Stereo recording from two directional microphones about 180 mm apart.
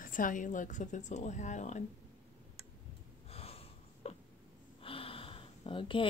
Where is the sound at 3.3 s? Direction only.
35° left (ahead or behind).